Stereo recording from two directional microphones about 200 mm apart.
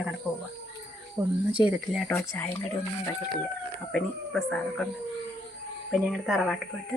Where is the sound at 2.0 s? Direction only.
10° left (ahead or behind).